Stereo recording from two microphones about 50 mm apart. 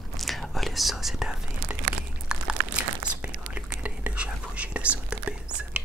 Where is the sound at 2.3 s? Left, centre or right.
Centre.